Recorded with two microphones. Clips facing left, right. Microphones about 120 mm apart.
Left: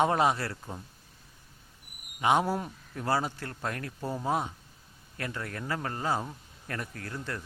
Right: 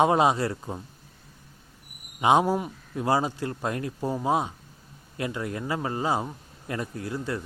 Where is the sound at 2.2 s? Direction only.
15° right (ahead or behind).